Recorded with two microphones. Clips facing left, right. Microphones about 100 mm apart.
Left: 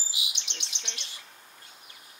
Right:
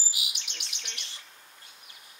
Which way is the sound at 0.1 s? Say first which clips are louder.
Left 1 dB; 20° left (ahead or behind).